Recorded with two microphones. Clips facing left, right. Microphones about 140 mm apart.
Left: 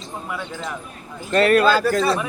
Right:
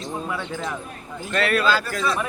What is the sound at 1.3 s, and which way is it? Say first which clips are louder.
Speech: left 6 dB; 40° left (ahead or behind).